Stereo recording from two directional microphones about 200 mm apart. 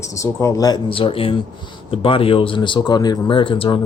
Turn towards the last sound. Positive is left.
turn(degrees=25)  # may be behind; listen again after turning